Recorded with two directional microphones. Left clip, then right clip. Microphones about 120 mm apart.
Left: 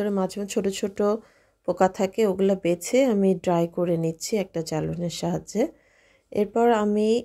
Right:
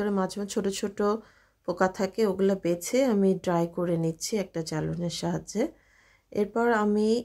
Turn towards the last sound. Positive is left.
turn(degrees=25)  # may be behind; listen again after turning